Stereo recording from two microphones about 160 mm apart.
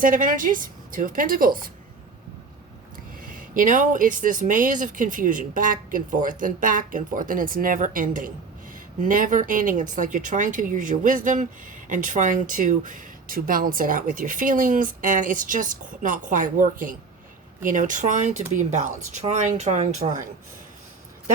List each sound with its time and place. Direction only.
0.0 s speech: 55° right (ahead or behind)
3.2 s speech: 60° right (ahead or behind)